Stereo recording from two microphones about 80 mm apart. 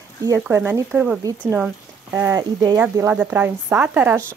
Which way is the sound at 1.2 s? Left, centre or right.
Right.